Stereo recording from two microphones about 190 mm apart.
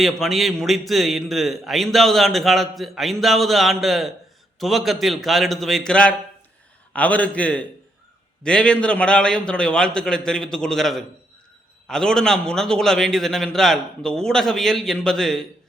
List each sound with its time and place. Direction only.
0.0 s a man's voice: centre (ahead or behind)